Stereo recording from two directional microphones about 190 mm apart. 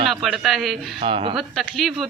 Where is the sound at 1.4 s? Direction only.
Centre (ahead or behind).